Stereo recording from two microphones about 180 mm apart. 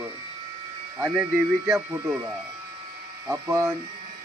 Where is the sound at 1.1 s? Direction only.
10° right (ahead or behind).